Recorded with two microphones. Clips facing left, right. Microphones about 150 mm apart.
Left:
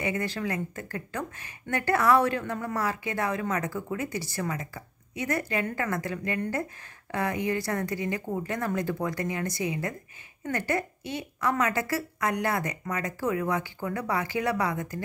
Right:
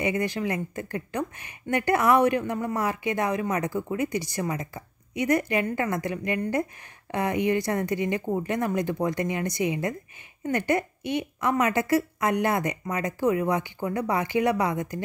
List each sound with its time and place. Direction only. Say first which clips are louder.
0.0 s a woman's voice: right 4 dB; 15° right (ahead or behind)